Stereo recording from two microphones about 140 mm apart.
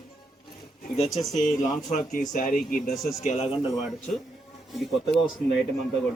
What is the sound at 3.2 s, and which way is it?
Speech, 45° left (ahead or behind).